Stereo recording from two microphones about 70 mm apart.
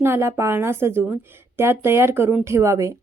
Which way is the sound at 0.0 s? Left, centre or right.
Right.